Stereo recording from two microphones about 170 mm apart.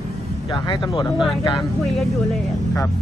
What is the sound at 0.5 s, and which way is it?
Speech, 25° left (ahead or behind).